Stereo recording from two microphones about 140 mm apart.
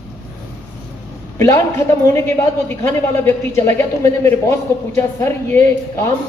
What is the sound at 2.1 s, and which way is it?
A woman's voice, 20° left (ahead or behind).